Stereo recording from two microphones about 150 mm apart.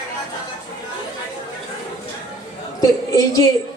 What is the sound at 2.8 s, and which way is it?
Speech, 25° left (ahead or behind).